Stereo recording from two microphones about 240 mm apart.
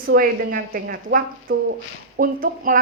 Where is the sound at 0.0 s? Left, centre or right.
Right.